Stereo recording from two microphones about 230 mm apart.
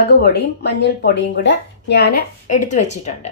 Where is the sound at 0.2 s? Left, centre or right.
Left.